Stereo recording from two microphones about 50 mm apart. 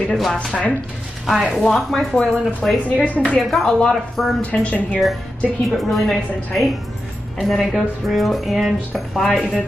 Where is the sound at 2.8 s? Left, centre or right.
Left.